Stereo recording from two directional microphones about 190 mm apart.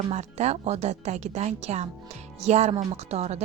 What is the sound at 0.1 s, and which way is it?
Speech, 35° right (ahead or behind).